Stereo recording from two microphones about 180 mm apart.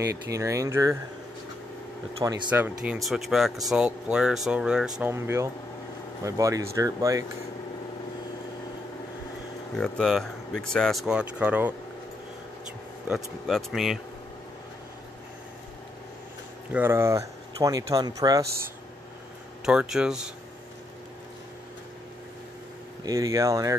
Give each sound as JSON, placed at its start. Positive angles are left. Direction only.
{"t": 0.0, "sound": "speech", "side_deg": -20}
{"t": 2.2, "sound": "speech", "side_deg": -25}
{"t": 2.5, "sound": "speech", "side_deg": -10}
{"t": 5.1, "sound": "speech", "side_deg": -15}
{"t": 9.8, "sound": "speech", "side_deg": 5}
{"t": 13.1, "sound": "speech", "side_deg": 0}
{"t": 16.7, "sound": "speech", "side_deg": -15}
{"t": 19.6, "sound": "speech", "side_deg": -5}
{"t": 23.0, "sound": "speech", "side_deg": -20}